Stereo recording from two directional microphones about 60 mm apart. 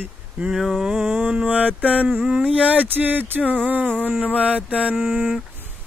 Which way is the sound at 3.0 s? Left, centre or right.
Right.